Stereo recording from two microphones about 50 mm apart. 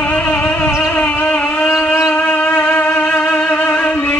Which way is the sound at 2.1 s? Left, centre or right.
Left.